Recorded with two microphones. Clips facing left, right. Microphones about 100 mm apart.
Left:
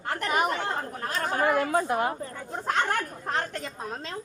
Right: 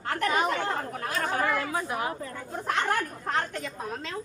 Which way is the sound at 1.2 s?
30° left (ahead or behind).